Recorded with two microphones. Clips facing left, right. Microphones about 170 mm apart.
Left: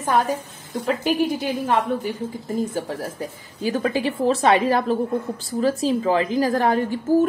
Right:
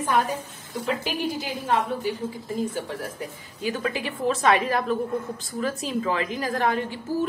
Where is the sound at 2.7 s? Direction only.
35° left (ahead or behind).